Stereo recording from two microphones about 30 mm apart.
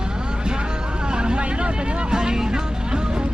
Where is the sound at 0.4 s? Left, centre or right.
Right.